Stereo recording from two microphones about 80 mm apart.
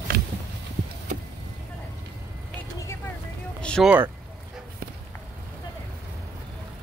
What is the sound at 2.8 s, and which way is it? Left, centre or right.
Vehicle, left.